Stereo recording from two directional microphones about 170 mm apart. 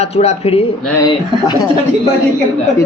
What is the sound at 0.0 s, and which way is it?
Speech, 40° left (ahead or behind).